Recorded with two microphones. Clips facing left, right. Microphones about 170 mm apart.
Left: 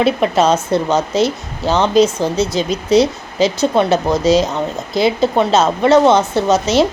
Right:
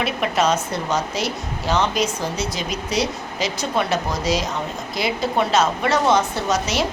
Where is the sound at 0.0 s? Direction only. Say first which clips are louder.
Left 7 dB; 30° left (ahead or behind).